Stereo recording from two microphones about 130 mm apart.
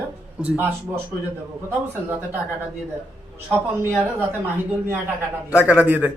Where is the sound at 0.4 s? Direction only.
15° right (ahead or behind).